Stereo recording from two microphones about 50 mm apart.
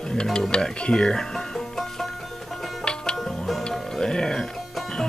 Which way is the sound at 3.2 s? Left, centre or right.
Centre.